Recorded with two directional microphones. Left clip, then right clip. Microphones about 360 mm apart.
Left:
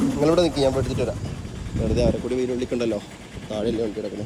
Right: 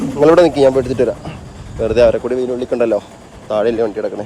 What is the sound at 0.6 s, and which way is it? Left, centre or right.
Speech, right.